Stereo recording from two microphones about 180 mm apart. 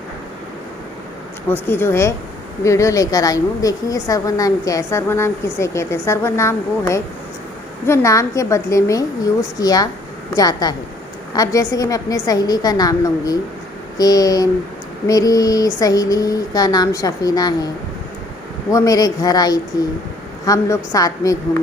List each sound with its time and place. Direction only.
1.5 s a woman's voice: 10° left (ahead or behind)
18.7 s speech: 20° left (ahead or behind)